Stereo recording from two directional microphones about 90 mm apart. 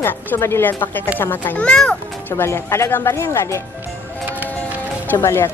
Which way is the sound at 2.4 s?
30° left (ahead or behind).